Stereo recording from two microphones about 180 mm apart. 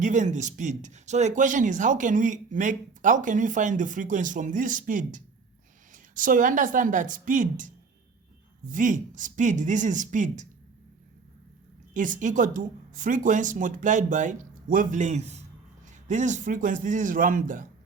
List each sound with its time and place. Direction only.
0.0 s speech: 45° right (ahead or behind)
11.9 s speech: 45° right (ahead or behind)